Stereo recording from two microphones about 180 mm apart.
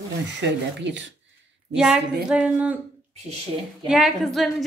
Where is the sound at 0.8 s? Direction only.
80° right.